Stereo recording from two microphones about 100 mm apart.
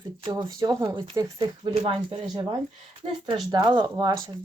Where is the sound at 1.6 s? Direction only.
65° right (ahead or behind).